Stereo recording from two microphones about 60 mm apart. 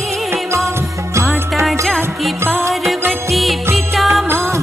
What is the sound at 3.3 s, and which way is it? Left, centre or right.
Music, centre.